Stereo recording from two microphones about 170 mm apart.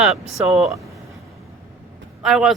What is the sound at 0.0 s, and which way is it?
Speech, centre (ahead or behind).